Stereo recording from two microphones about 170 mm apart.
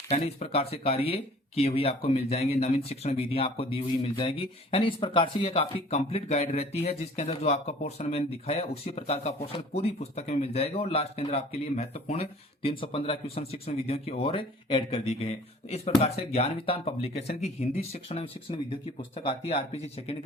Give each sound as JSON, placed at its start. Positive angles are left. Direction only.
{"t": 0.1, "sound": "speech", "side_deg": 40}